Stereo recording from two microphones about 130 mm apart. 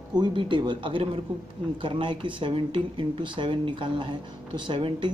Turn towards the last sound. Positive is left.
turn(degrees=-35)  # may be behind; listen again after turning